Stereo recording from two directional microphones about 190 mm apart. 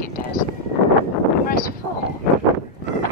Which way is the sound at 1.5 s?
50° left (ahead or behind).